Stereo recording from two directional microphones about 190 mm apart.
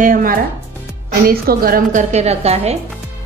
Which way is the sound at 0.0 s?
45° right (ahead or behind).